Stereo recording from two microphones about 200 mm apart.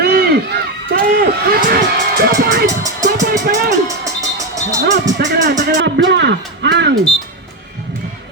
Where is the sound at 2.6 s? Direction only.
15° right (ahead or behind).